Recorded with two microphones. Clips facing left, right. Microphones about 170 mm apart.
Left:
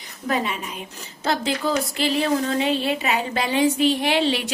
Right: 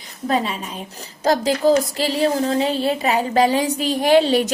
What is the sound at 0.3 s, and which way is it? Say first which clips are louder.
A woman's voice: right 3 dB; 30° right (ahead or behind).